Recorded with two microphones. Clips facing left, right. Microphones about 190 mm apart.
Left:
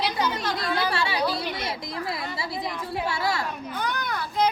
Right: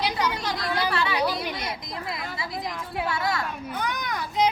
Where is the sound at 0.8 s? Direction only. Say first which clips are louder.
Right 2 dB; 30° left (ahead or behind).